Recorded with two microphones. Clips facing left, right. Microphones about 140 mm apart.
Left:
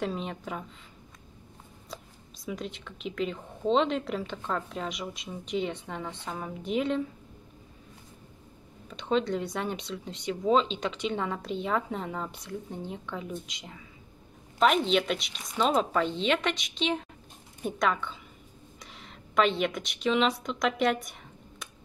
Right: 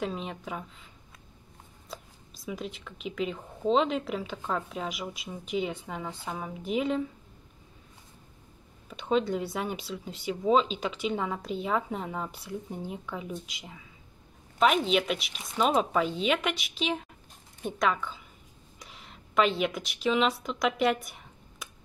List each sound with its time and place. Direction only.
0.0 s speech: centre (ahead or behind)
1.9 s speech: centre (ahead or behind)
8.8 s a woman's voice: 5° right (ahead or behind)